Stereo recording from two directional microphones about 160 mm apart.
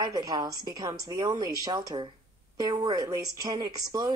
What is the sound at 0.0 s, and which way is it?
A woman's voice, 25° right (ahead or behind).